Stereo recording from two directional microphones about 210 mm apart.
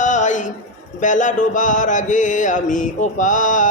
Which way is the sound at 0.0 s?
35° left (ahead or behind).